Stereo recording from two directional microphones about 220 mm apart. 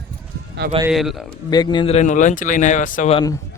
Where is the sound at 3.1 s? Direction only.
15° left (ahead or behind).